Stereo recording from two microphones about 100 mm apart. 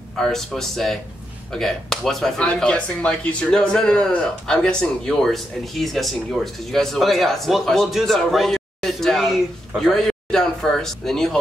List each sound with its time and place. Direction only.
0.1 s speech: 5° left (ahead or behind)